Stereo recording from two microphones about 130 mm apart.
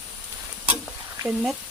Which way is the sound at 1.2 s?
40° right (ahead or behind).